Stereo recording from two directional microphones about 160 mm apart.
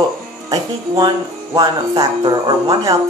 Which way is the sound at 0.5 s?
25° right (ahead or behind).